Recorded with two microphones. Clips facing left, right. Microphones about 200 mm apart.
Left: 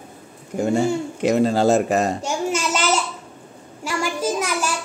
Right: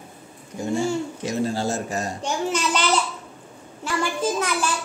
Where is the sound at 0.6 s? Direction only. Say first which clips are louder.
Left 4 dB; 65° left (ahead or behind).